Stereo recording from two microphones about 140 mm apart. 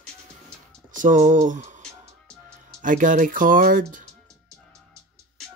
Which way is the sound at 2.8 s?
70° right (ahead or behind).